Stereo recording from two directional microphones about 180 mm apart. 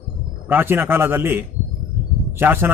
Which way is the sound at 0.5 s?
10° right (ahead or behind).